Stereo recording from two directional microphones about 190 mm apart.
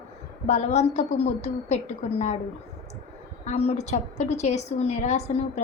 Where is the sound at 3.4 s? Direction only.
35° left (ahead or behind).